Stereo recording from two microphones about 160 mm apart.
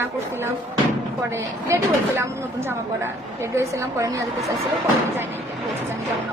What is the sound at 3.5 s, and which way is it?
Speech, 20° right (ahead or behind).